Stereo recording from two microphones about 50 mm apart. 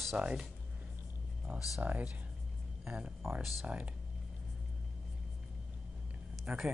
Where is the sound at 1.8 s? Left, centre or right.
Right.